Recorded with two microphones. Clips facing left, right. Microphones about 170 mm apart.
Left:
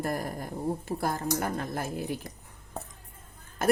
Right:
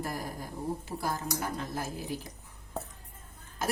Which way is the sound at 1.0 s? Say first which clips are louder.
Left 4 dB; 55° left (ahead or behind).